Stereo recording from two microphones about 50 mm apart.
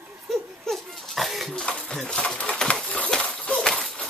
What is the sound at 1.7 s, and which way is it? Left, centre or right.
Pigeon, centre.